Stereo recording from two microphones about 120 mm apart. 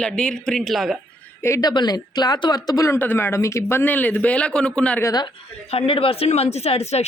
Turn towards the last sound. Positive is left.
turn(degrees=60)  # may be behind; listen again after turning